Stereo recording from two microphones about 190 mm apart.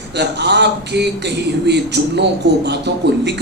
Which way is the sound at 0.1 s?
60° right (ahead or behind).